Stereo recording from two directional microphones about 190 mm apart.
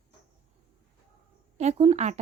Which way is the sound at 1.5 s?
35° right (ahead or behind).